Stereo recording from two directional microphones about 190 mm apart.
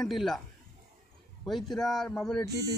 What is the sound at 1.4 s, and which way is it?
Speech, centre (ahead or behind).